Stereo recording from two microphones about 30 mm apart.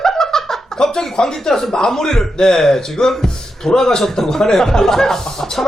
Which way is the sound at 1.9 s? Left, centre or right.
Centre.